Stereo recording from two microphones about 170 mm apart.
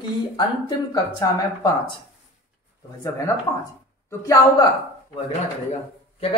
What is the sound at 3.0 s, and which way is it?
A woman's voice, 20° left (ahead or behind).